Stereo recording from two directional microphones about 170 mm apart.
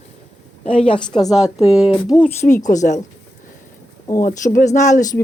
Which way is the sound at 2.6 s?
45° left (ahead or behind).